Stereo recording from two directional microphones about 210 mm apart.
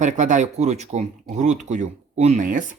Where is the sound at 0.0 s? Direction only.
35° right (ahead or behind).